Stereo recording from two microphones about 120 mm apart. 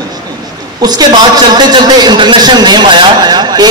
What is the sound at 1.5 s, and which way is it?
A man's voice, 35° right (ahead or behind).